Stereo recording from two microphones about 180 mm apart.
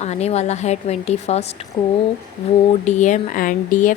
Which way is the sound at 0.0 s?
35° left (ahead or behind).